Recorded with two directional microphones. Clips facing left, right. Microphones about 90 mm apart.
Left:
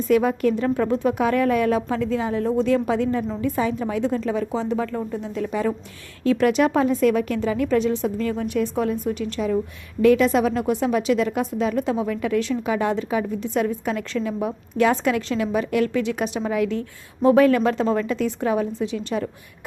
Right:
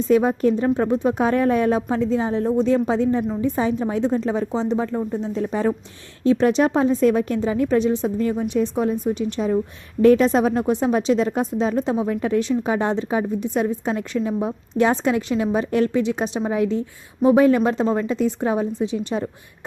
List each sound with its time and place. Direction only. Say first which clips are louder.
0.1 s a woman's voice: right 1 dB; 25° right (ahead or behind)